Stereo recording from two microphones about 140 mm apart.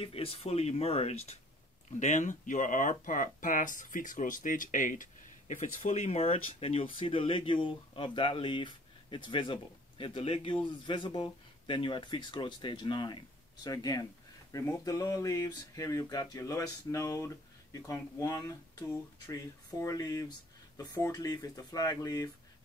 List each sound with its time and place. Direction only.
0.0 s speech: 45° left (ahead or behind)
2.0 s speech: 60° left (ahead or behind); by 22.3 s 25° left (ahead or behind)